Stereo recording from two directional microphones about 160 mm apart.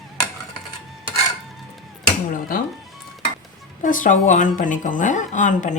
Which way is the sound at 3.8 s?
55° left (ahead or behind).